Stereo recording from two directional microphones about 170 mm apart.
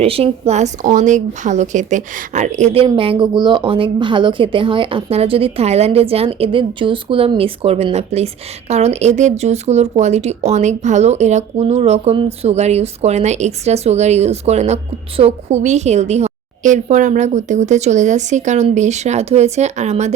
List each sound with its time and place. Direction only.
0.0 s a woman's voice: 35° right (ahead or behind)